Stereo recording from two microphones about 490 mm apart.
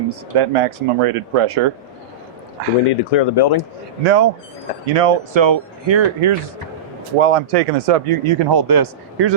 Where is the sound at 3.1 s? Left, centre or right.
Left.